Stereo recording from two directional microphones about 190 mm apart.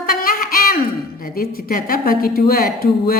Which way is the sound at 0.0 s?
50° left (ahead or behind).